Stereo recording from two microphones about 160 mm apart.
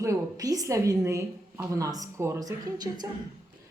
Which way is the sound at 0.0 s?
20° right (ahead or behind).